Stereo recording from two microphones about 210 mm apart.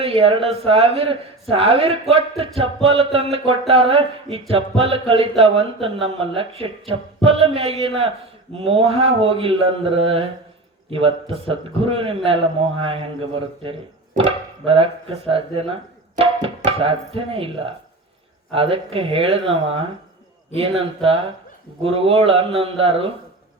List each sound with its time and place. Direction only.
0.0 s speech: 25° right (ahead or behind)
15.3 s speech: 25° right (ahead or behind)
18.5 s speech: 25° right (ahead or behind)